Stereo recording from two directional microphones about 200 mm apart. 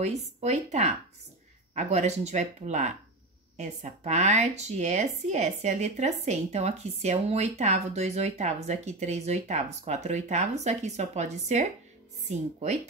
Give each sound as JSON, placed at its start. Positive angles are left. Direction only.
{"t": 0.0, "sound": "speech", "side_deg": -35}